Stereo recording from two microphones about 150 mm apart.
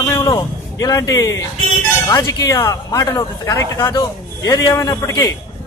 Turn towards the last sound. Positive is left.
turn(degrees=20)  # may be behind; listen again after turning